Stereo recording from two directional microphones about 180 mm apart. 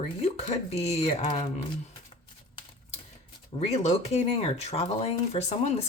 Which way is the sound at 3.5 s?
35° left (ahead or behind).